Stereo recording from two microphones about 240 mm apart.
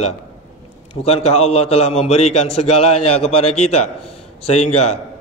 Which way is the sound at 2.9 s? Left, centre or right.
Left.